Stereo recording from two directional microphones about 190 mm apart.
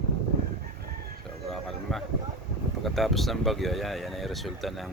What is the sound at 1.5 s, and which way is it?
Speech, centre (ahead or behind).